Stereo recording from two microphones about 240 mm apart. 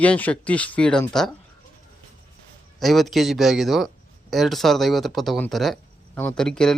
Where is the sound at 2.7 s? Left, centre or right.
Centre.